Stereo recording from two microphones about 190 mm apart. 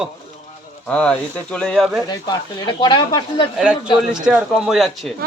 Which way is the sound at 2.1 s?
20° left (ahead or behind).